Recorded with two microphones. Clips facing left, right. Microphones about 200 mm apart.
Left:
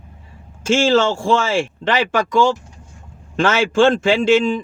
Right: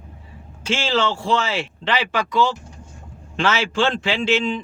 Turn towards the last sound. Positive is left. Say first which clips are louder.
# left 6 dB
turn(degrees=45)  # may be behind; listen again after turning